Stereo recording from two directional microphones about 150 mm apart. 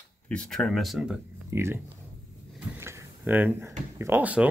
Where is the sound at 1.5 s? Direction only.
15° right (ahead or behind).